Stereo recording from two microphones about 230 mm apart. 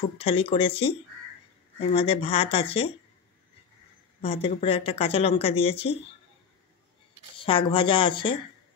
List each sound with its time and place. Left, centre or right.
0.2 s speech: left
4.2 s speech: left
7.3 s speech: left